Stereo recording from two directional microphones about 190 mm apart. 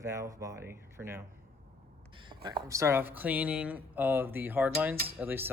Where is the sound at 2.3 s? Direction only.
25° right (ahead or behind).